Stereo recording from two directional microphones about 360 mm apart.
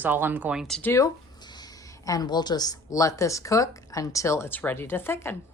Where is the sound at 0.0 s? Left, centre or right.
Centre.